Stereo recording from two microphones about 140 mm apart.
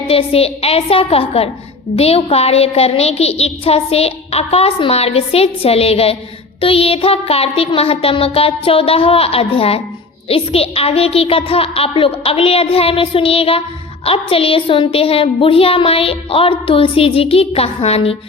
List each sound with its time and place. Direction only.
0.1 s a child's voice: 45° left (ahead or behind)